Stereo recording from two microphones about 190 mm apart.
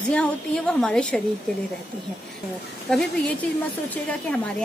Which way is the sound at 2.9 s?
5° left (ahead or behind).